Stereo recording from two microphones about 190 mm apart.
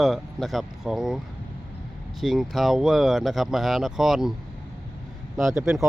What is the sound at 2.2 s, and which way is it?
Speech, centre (ahead or behind).